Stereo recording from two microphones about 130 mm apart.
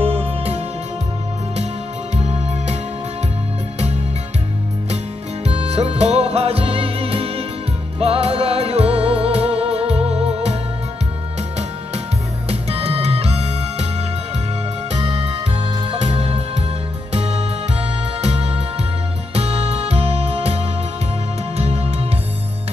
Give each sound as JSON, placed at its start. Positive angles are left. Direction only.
{"t": 0.0, "sound": "music", "side_deg": -45}
{"t": 2.1, "sound": "music", "side_deg": -55}
{"t": 5.4, "sound": "music", "side_deg": -55}
{"t": 12.4, "sound": "music", "side_deg": -50}
{"t": 15.0, "sound": "music", "side_deg": -50}